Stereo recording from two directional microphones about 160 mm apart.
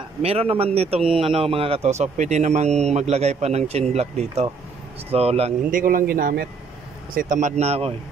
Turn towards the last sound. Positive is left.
turn(degrees=-40)  # may be behind; listen again after turning